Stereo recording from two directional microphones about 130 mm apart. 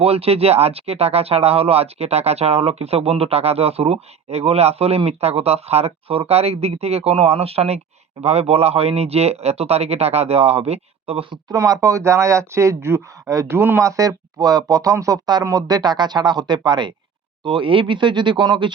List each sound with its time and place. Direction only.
0.0 s speech: 50° right (ahead or behind)
11.4 s speech: 30° right (ahead or behind)